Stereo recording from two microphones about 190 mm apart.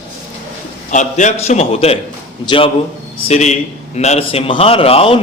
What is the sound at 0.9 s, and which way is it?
A man's voice, 40° left (ahead or behind).